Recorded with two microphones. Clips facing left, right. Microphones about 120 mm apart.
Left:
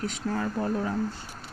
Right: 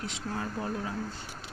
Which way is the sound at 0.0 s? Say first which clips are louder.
Left 6 dB; 50° left (ahead or behind).